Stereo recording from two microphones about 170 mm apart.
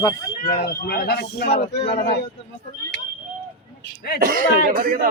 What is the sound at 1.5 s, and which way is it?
Speech, 30° left (ahead or behind).